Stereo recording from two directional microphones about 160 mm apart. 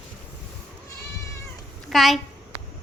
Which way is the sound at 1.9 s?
Centre (ahead or behind).